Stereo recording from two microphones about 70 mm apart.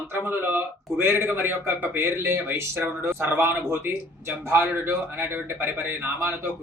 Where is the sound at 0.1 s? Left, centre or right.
Right.